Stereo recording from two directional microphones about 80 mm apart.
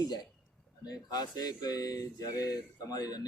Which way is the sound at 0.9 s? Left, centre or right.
Left.